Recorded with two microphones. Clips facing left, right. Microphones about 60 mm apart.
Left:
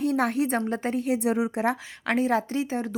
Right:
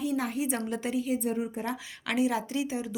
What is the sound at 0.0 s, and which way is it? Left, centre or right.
Speech, left.